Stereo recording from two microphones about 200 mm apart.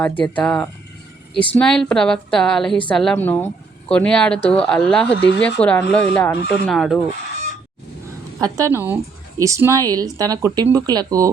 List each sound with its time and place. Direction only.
0.0 s speech: 5° left (ahead or behind)
8.4 s speech: 15° right (ahead or behind)